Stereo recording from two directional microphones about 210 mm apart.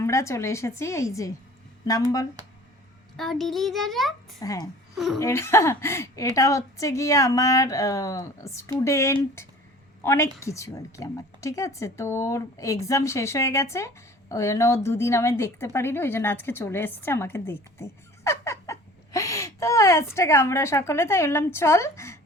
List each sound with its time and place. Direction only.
0.0 s speech: 15° left (ahead or behind)
3.2 s a child's voice: centre (ahead or behind)
4.4 s speech: 15° left (ahead or behind)
4.9 s a child's voice: centre (ahead or behind)
5.2 s a woman's voice: 15° left (ahead or behind)